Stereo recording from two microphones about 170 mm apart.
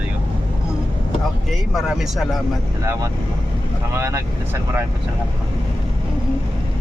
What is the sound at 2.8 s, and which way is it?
Speech, 15° right (ahead or behind).